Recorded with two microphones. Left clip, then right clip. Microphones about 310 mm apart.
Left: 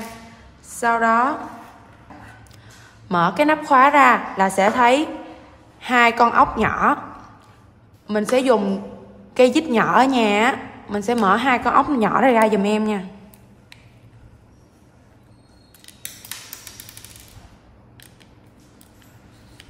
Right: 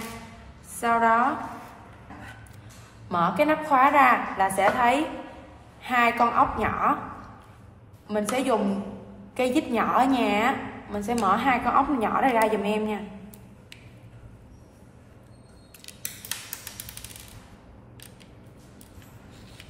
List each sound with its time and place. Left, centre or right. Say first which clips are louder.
0.7 s a woman's voice: left 4 dB; left
3.1 s a woman's voice: left 5 dB; left
8.1 s a woman's voice: left 8 dB; left